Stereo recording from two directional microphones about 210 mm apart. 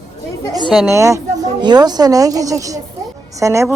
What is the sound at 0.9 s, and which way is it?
A woman's voice, 15° right (ahead or behind).